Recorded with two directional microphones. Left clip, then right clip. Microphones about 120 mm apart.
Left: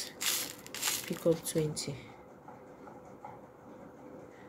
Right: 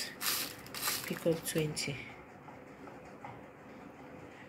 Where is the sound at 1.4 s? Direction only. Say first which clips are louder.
Left 1 dB; 35° left (ahead or behind).